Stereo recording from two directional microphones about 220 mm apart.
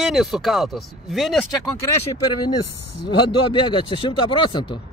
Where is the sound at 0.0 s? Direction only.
Centre (ahead or behind).